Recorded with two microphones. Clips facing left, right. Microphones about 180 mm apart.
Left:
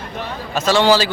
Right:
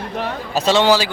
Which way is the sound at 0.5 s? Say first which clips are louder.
Even; 25° right (ahead or behind).